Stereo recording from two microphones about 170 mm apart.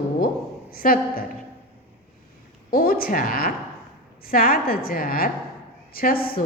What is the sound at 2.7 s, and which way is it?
A woman's voice, 60° left (ahead or behind).